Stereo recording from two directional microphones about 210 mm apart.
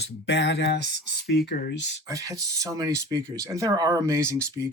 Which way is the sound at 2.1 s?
15° right (ahead or behind).